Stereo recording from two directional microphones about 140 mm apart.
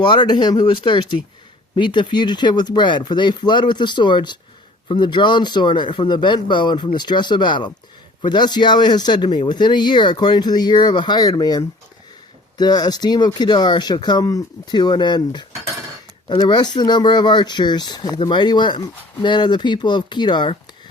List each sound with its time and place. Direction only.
0.0 s speech: 30° left (ahead or behind)